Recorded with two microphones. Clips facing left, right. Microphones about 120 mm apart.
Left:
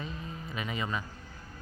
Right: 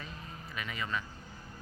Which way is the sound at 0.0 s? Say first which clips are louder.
Left 6 dB; 20° left (ahead or behind).